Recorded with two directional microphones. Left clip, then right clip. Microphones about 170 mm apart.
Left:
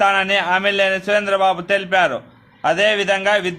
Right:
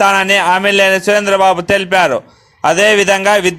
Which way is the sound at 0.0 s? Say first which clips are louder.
Right 6 dB; 40° right (ahead or behind).